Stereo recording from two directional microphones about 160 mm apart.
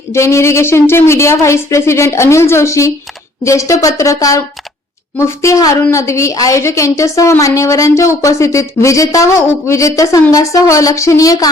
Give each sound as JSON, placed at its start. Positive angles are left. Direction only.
{"t": 0.1, "sound": "a woman's voice", "side_deg": 20}